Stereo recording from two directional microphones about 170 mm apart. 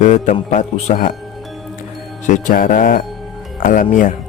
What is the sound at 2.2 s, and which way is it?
Speech, 50° left (ahead or behind).